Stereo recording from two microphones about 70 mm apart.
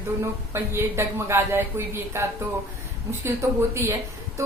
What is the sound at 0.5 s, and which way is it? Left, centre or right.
Speech, right.